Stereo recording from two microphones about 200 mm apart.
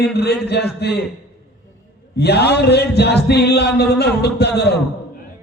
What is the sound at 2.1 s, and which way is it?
A man's voice, 55° left (ahead or behind).